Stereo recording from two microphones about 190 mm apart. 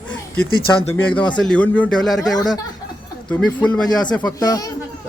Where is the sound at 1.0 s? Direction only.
10° left (ahead or behind).